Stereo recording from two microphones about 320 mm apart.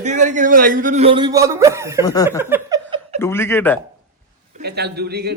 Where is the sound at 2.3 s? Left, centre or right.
Centre.